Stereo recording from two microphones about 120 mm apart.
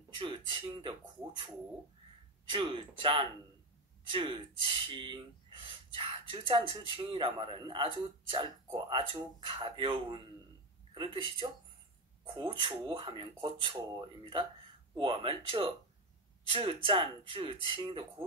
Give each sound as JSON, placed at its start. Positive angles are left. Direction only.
{"t": 0.1, "sound": "speech", "side_deg": -45}
{"t": 2.5, "sound": "speech", "side_deg": -40}